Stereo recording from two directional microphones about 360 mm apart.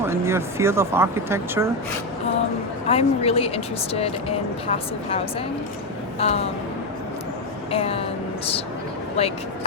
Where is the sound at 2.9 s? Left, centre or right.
Centre.